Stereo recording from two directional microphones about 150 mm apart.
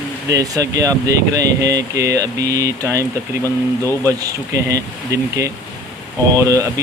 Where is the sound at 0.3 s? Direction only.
20° right (ahead or behind).